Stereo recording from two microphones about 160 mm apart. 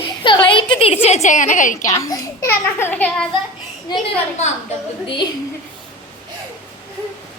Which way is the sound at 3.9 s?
25° left (ahead or behind).